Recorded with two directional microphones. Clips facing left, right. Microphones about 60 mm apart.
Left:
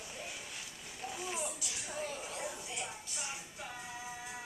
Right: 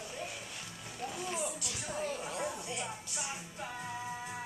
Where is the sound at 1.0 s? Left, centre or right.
Centre.